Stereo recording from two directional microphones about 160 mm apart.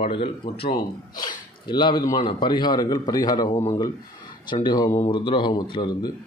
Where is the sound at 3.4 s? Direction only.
45° left (ahead or behind).